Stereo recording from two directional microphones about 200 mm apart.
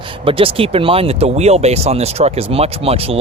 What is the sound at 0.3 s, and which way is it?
Speech, 25° right (ahead or behind).